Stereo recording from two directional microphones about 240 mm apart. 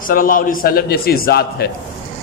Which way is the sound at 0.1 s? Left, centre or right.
Left.